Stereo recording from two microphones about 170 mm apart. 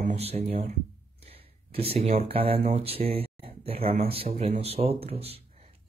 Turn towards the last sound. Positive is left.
turn(degrees=-35)  # may be behind; listen again after turning